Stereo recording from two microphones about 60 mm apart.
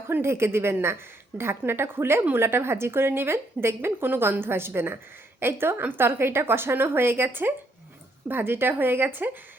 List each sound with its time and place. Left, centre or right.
0.1 s a woman's voice: right